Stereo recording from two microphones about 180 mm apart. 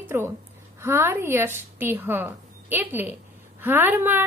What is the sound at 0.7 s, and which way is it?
A woman's voice, 15° right (ahead or behind).